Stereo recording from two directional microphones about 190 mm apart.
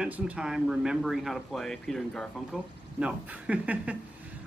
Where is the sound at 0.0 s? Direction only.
5° right (ahead or behind).